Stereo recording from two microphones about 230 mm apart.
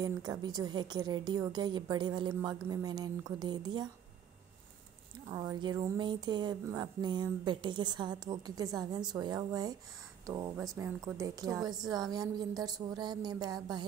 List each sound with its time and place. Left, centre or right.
0.0 s a woman's voice: centre
5.3 s speech: centre